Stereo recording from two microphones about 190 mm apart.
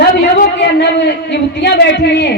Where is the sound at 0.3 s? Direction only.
60° left (ahead or behind).